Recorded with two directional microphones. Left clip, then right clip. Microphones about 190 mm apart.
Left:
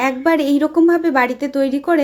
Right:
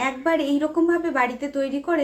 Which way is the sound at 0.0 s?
50° left (ahead or behind).